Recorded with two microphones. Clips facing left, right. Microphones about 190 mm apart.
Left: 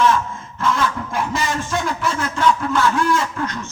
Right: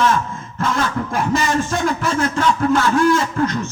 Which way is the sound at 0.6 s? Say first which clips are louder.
Even; 45° right (ahead or behind).